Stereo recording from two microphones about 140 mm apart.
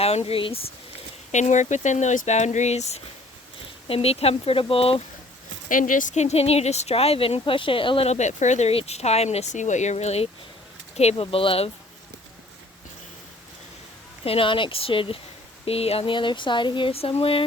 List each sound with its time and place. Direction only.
0.0 s speech: 45° left (ahead or behind)
1.3 s speech: 60° left (ahead or behind); by 5.0 s 45° left (ahead or behind)
5.6 s speech: 70° left (ahead or behind); by 11.7 s 40° left (ahead or behind)
14.3 s speech: 40° left (ahead or behind)